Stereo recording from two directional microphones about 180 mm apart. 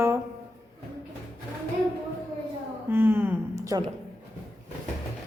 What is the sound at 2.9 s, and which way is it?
Speech, 10° right (ahead or behind).